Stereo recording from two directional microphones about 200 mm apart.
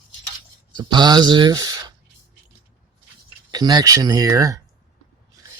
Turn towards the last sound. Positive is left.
turn(degrees=-15)  # may be behind; listen again after turning